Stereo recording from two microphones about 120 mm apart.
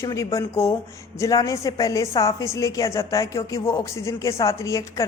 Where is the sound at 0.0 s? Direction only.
25° left (ahead or behind).